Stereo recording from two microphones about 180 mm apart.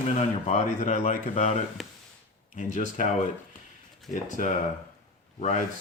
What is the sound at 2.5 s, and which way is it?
Speech, 45° left (ahead or behind).